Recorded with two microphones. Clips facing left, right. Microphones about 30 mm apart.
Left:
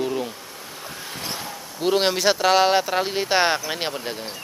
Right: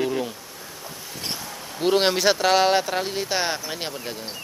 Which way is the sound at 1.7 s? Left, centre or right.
Centre.